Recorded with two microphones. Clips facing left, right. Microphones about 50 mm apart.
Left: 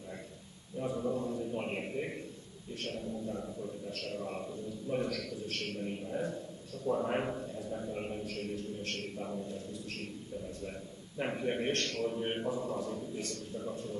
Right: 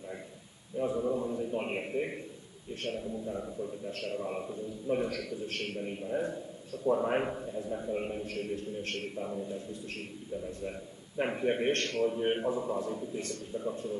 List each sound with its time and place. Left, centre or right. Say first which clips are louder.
0.7 s a man's voice: right 4 dB; centre